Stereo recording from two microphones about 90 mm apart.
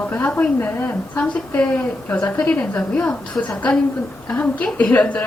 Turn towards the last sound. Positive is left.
turn(degrees=15)  # may be behind; listen again after turning